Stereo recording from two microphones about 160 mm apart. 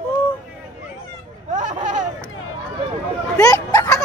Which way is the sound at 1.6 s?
55° right (ahead or behind).